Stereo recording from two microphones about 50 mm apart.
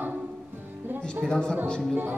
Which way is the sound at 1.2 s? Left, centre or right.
Centre.